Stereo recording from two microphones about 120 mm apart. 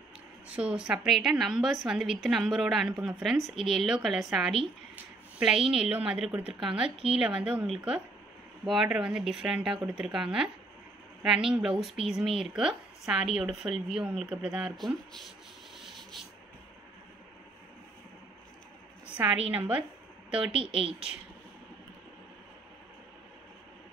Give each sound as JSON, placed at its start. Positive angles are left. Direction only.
{"t": 0.5, "sound": "a woman's voice", "side_deg": -10}
{"t": 15.8, "sound": "rub", "side_deg": 0}
{"t": 19.1, "sound": "a woman's voice", "side_deg": -10}
{"t": 20.5, "sound": "speech", "side_deg": -50}